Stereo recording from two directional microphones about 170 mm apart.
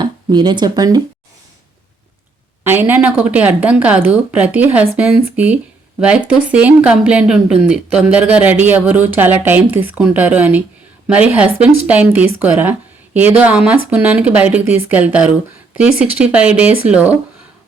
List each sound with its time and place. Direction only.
0.0 s speech: 25° right (ahead or behind)
2.6 s speech: 10° right (ahead or behind)